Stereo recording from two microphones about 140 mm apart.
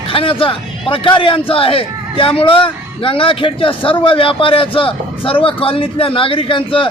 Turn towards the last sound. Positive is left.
turn(degrees=40)  # may be behind; listen again after turning